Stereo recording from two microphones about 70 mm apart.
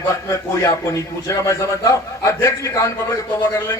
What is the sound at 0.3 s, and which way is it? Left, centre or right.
A man's voice, left.